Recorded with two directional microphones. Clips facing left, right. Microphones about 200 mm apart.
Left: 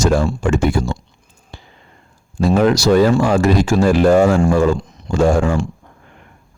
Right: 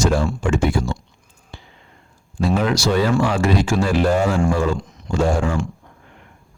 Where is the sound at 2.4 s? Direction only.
40° left (ahead or behind).